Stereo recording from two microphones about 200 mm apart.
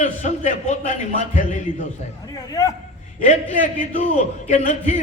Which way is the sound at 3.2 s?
40° left (ahead or behind).